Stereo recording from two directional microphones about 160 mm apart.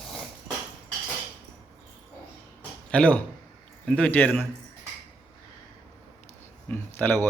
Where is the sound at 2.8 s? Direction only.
10° left (ahead or behind).